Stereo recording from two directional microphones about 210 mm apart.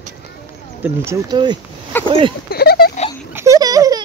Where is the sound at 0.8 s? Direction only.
15° right (ahead or behind).